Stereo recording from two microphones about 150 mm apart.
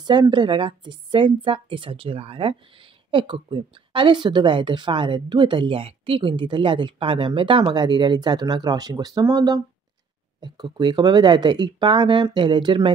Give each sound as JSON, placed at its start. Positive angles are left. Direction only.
{"t": 0.0, "sound": "a woman's voice", "side_deg": -30}